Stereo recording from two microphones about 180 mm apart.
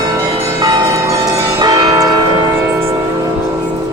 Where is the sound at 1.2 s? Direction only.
20° right (ahead or behind).